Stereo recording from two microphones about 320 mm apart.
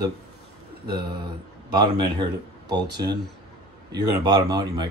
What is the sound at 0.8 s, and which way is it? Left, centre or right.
Speech, centre.